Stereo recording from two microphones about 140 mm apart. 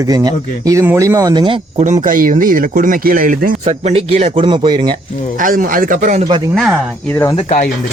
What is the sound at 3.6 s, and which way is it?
Speech, 45° right (ahead or behind).